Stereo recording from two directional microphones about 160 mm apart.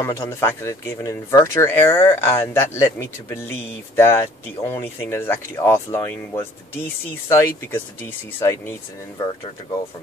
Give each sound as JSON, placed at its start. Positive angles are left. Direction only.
{"t": 0.0, "sound": "speech", "side_deg": 15}